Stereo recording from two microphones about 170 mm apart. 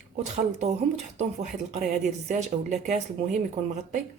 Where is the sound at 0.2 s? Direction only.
45° right (ahead or behind).